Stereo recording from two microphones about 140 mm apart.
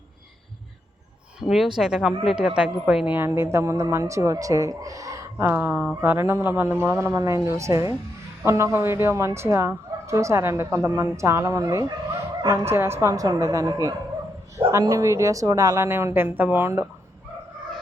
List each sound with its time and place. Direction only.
1.4 s a woman's voice: 5° right (ahead or behind); by 12.5 s 30° right (ahead or behind)
12.7 s a woman's voice: 15° right (ahead or behind)